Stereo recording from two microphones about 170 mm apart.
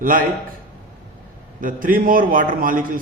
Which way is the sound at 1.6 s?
55° right (ahead or behind).